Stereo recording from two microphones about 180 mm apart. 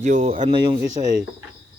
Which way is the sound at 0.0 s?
45° right (ahead or behind).